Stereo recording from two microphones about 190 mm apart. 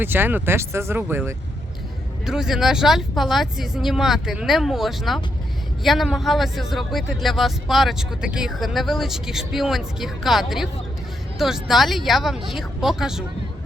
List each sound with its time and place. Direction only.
0.0 s a man's voice: 10° right (ahead or behind)